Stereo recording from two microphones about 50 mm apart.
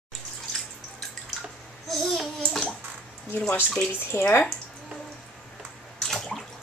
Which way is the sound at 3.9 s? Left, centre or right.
Left.